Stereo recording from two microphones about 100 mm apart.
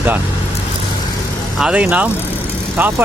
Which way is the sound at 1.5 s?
10° right (ahead or behind).